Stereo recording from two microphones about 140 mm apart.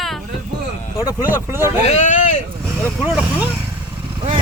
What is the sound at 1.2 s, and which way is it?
Speech, 15° right (ahead or behind).